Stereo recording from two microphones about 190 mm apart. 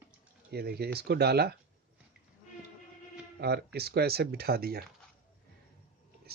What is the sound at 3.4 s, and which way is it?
Speech, 60° right (ahead or behind).